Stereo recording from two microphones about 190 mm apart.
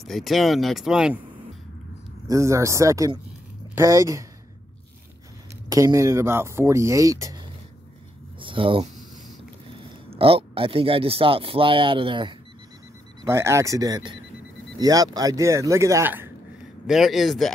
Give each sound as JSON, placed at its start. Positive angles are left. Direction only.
{"t": 0.0, "sound": "speech", "side_deg": 0}
{"t": 2.2, "sound": "speech", "side_deg": -15}
{"t": 5.7, "sound": "speech", "side_deg": -15}
{"t": 8.4, "sound": "a sound", "side_deg": -25}
{"t": 9.7, "sound": "speech", "side_deg": -30}
{"t": 13.2, "sound": "speech", "side_deg": -15}